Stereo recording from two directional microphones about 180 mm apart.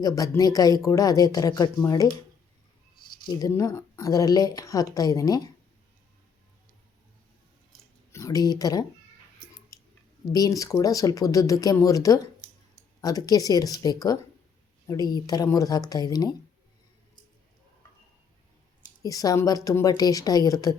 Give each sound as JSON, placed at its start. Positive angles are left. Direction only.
{"t": 0.0, "sound": "speech", "side_deg": 20}
{"t": 3.2, "sound": "speech", "side_deg": 20}
{"t": 8.1, "sound": "speech", "side_deg": 20}
{"t": 9.7, "sound": "a sound", "side_deg": 20}
{"t": 10.3, "sound": "speech", "side_deg": 20}
{"t": 19.0, "sound": "speech", "side_deg": 20}